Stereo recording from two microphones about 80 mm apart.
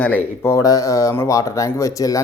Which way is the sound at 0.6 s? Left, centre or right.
Left.